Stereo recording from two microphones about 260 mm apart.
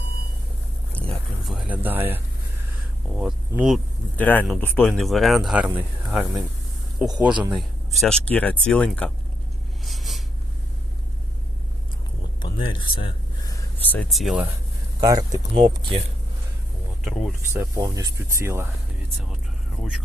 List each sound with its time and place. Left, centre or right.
0.9 s a sound: centre
3.2 s speech: centre
7.1 s speech: centre
9.8 s writing: centre
12.4 s speech: centre
15.0 s speech: centre
17.0 s speech: centre
17.5 s speech: centre